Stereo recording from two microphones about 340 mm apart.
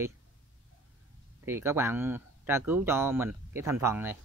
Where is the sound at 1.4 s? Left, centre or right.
Centre.